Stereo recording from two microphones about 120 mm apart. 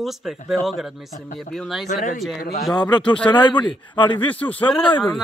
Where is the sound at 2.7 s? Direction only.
35° left (ahead or behind).